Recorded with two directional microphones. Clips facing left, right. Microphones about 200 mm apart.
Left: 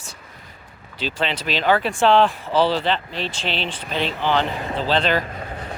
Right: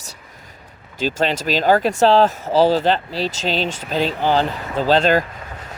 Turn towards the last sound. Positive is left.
turn(degrees=-45)  # may be behind; listen again after turning